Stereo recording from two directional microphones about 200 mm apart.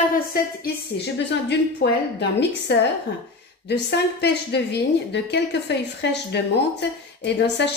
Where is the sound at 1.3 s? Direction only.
60° left (ahead or behind).